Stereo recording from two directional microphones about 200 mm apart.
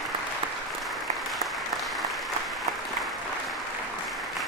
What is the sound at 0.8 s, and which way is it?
Applause, centre (ahead or behind).